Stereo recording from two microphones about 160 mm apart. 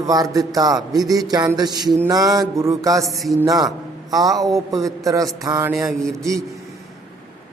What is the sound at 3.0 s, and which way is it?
Speech, centre (ahead or behind).